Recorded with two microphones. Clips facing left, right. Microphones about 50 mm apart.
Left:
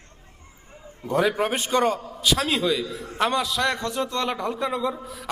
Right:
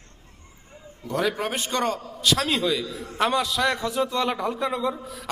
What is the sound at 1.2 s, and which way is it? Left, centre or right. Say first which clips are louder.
A man's voice: left 3 dB; centre.